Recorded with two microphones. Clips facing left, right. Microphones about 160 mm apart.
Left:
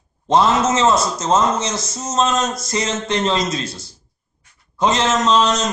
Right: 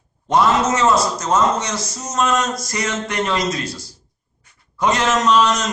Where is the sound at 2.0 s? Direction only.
25° left (ahead or behind).